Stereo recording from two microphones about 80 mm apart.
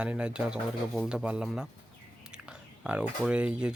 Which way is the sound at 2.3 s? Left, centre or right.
Centre.